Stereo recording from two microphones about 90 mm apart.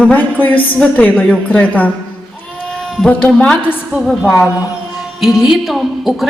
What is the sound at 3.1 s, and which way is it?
Speech, 15° left (ahead or behind).